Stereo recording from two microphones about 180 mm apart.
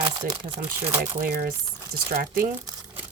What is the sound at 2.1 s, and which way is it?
Speech, 50° right (ahead or behind).